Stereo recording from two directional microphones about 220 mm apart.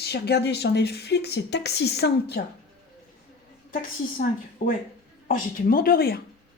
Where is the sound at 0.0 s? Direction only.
50° left (ahead or behind).